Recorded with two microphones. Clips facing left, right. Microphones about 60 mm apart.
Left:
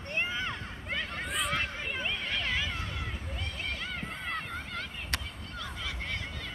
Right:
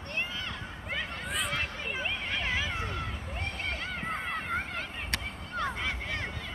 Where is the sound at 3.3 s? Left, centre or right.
Right.